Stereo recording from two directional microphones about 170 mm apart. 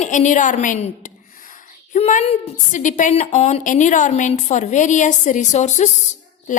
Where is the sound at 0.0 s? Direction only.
45° left (ahead or behind).